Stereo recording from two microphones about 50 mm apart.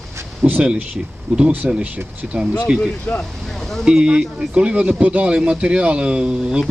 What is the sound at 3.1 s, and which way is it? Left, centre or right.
Speech, left.